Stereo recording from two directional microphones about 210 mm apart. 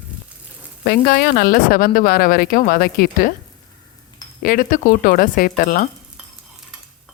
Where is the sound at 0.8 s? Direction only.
45° left (ahead or behind).